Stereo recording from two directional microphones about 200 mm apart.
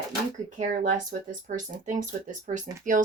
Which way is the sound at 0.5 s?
40° right (ahead or behind).